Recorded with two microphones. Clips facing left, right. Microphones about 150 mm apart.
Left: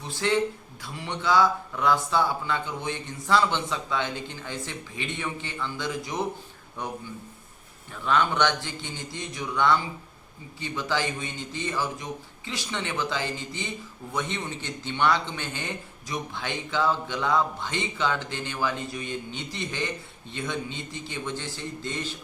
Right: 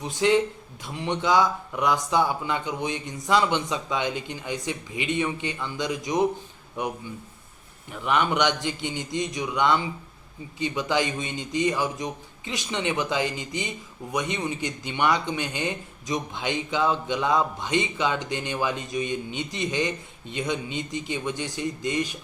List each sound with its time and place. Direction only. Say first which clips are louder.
0.0 s speech: right 4 dB; 15° right (ahead or behind)
8.0 s speech: right 1 dB; 15° right (ahead or behind)